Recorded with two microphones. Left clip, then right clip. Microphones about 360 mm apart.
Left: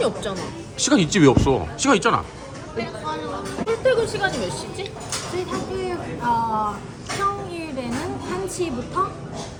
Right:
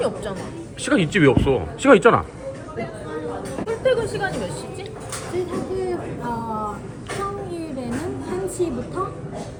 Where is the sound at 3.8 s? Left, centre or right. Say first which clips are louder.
Left 1 dB; left.